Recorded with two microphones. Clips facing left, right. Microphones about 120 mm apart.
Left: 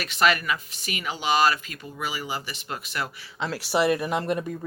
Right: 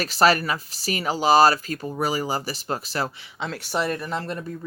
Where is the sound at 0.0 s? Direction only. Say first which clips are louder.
Right 4 dB; 35° right (ahead or behind).